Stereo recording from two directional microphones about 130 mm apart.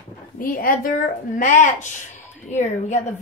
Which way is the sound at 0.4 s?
90° left.